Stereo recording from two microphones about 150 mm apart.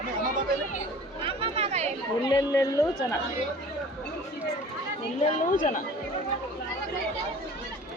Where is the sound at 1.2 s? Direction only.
40° right (ahead or behind).